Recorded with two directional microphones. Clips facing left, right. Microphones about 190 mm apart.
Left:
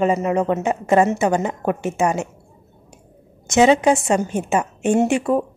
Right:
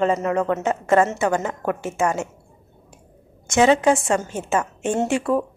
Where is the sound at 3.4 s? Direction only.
20° left (ahead or behind).